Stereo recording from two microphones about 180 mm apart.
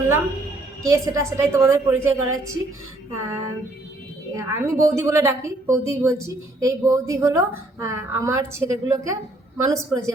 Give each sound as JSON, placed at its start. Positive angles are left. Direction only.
{"t": 0.8, "sound": "a woman's voice", "side_deg": -15}